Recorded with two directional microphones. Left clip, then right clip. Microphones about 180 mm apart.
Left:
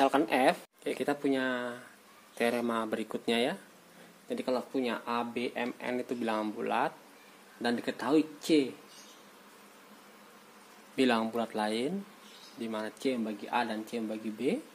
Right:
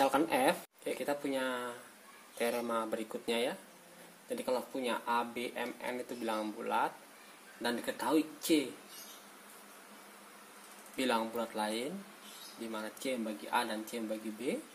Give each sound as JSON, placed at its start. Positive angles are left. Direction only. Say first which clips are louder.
{"t": 0.0, "sound": "speech", "louder": "left 3 dB", "side_deg": 50}
{"t": 11.0, "sound": "speech", "louder": "left 5 dB", "side_deg": 50}